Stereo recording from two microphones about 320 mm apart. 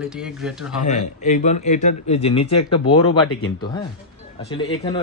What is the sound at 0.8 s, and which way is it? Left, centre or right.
A man's voice, left.